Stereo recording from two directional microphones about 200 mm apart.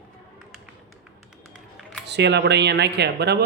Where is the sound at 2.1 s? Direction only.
60° right (ahead or behind).